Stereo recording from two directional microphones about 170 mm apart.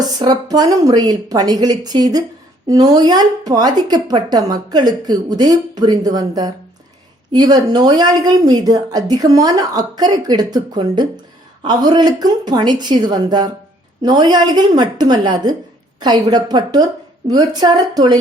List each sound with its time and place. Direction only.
0.2 s a woman's voice: 25° right (ahead or behind)